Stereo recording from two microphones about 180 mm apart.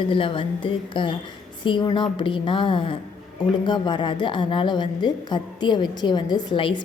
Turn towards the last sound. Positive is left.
turn(degrees=25)  # may be behind; listen again after turning